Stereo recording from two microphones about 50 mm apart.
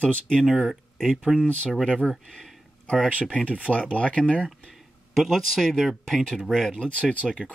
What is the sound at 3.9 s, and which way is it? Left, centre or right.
Speech, left.